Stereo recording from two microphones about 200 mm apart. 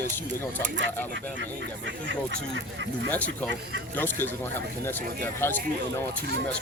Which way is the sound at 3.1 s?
5° left (ahead or behind).